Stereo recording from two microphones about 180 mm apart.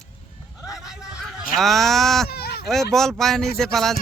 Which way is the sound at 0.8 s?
5° right (ahead or behind).